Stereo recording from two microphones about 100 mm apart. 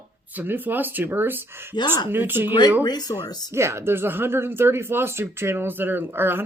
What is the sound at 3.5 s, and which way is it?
Speech, 25° right (ahead or behind).